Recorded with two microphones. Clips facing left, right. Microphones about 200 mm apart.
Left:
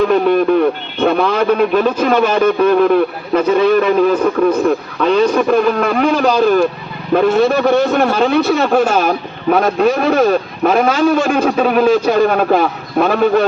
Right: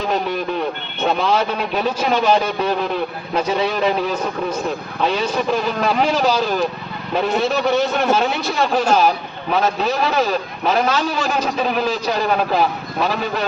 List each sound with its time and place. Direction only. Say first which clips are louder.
0.0 s a man's voice: left 10 dB; 55° left (ahead or behind)